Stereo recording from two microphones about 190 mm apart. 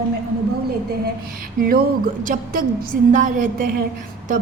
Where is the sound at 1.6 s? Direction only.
50° right (ahead or behind).